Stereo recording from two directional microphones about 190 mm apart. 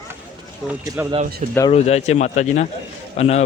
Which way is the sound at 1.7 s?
35° left (ahead or behind).